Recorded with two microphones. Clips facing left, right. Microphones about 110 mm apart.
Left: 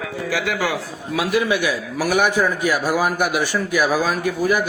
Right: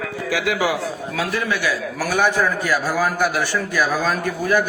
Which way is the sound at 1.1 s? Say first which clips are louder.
Left 6 dB; 15° left (ahead or behind).